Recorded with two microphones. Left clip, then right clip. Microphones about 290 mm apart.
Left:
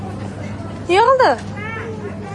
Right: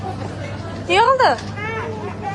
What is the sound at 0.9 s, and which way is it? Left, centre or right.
Speech, centre.